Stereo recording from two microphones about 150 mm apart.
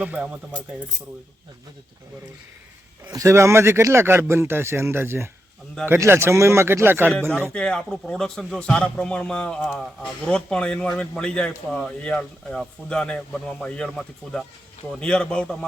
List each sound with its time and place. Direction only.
0.0 s speech: 10° right (ahead or behind)
3.1 s speech: 20° right (ahead or behind)
7.1 s a man's voice: 5° left (ahead or behind)